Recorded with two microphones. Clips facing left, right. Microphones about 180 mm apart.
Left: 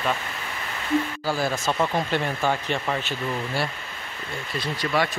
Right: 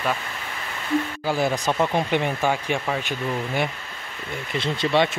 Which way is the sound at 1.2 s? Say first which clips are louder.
Right 2 dB; 20° right (ahead or behind).